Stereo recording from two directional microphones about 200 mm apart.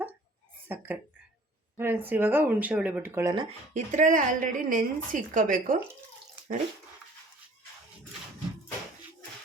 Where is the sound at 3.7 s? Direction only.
40° right (ahead or behind).